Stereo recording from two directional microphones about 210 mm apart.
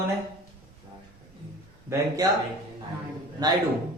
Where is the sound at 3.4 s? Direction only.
20° right (ahead or behind).